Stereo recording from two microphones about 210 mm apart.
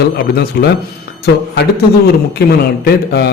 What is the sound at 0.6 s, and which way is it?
A man's voice, 45° left (ahead or behind).